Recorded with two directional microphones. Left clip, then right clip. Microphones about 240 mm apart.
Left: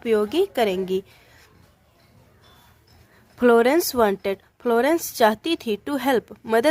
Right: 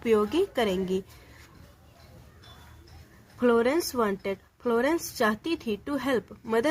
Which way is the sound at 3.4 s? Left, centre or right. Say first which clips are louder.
Left 7 dB; left.